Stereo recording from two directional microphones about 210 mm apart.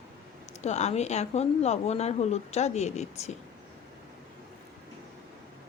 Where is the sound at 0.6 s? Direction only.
35° left (ahead or behind).